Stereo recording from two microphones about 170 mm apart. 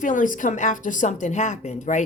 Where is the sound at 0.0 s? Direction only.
50° left (ahead or behind).